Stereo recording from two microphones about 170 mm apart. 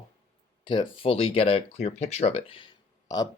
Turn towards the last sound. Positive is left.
turn(degrees=20)  # may be behind; listen again after turning